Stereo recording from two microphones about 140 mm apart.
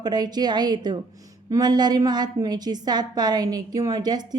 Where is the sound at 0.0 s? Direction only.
30° right (ahead or behind).